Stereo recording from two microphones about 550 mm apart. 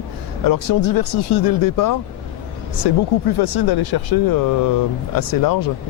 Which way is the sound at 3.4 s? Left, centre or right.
Left.